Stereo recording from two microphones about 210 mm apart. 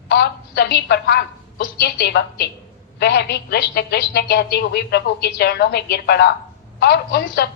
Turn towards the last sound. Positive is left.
turn(degrees=50)  # may be behind; listen again after turning